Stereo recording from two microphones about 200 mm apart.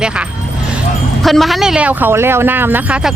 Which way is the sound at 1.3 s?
Centre (ahead or behind).